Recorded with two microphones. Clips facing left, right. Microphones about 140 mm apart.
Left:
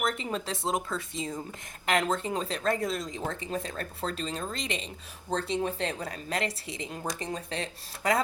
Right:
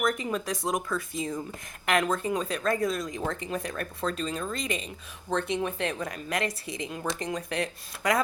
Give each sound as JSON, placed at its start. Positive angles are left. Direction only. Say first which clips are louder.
{"t": 0.2, "sound": "speech", "louder": "right 2 dB", "side_deg": 25}